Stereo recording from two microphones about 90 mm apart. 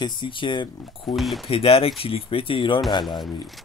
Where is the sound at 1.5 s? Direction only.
90° left.